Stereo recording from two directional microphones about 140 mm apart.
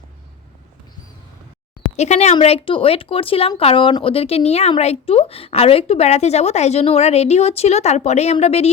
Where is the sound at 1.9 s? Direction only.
55° left (ahead or behind).